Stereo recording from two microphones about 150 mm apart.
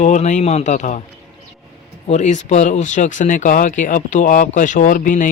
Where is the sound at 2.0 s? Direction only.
50° left (ahead or behind).